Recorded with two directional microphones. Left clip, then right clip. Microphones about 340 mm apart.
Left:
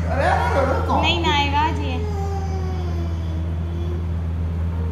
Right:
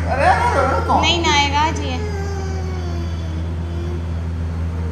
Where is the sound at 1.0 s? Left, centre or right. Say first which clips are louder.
Right 3 dB; centre.